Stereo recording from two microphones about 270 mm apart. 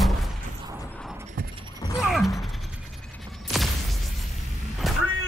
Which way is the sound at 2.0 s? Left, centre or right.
Centre.